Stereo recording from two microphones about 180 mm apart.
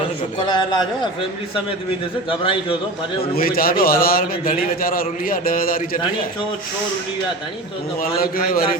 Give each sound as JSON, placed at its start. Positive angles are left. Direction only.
{"t": 0.4, "sound": "a man's voice", "side_deg": 25}
{"t": 2.4, "sound": "a man's voice", "side_deg": 30}
{"t": 3.3, "sound": "a man's voice", "side_deg": 55}
{"t": 8.0, "sound": "a man's voice", "side_deg": 55}